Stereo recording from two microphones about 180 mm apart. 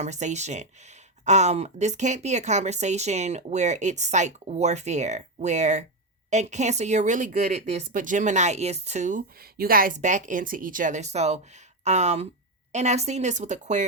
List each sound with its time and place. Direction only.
0.0 s speech: 40° right (ahead or behind)